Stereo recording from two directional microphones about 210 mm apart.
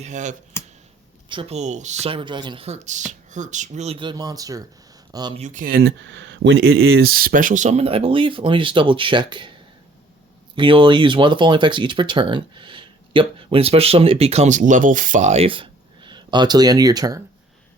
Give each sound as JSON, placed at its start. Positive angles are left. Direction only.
{"t": 0.0, "sound": "speech", "side_deg": -35}
{"t": 0.6, "sound": "a sound", "side_deg": 10}
{"t": 1.3, "sound": "speech", "side_deg": -25}
{"t": 5.4, "sound": "speech", "side_deg": -35}
{"t": 10.5, "sound": "speech", "side_deg": -25}